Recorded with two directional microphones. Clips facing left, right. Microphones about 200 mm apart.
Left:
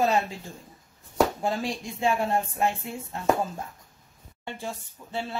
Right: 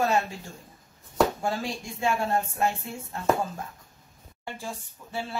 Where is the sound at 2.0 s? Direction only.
20° left (ahead or behind).